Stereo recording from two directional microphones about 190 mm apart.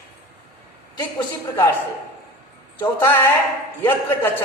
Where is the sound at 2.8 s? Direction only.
10° left (ahead or behind).